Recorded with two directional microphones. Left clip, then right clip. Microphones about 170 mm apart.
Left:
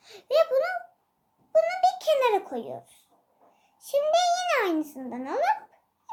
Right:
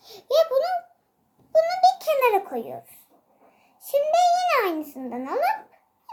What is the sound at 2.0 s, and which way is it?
Speech, 20° left (ahead or behind).